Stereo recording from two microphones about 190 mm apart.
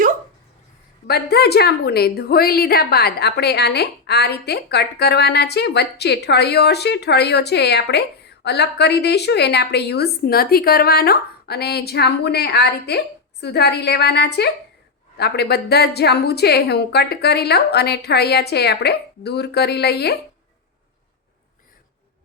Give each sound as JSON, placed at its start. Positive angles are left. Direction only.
{"t": 1.0, "sound": "a woman's voice", "side_deg": 55}